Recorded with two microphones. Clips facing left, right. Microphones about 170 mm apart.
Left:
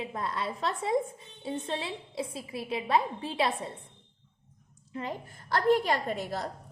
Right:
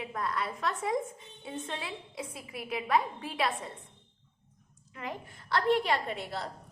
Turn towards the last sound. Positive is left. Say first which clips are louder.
# left 3 dB
turn(degrees=40)  # may be behind; listen again after turning